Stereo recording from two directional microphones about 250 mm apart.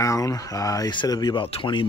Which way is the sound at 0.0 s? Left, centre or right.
Centre.